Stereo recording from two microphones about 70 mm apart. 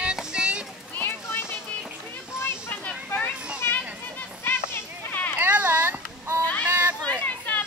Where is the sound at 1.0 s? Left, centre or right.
Left.